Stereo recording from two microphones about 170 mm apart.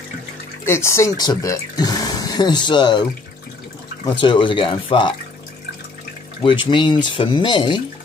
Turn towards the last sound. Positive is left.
turn(degrees=25)  # may be behind; listen again after turning